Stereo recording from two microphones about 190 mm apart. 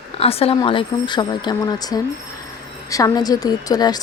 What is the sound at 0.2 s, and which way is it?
A woman's voice, 30° left (ahead or behind).